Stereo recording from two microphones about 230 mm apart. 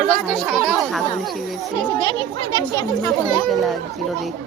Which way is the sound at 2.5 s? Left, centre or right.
Centre.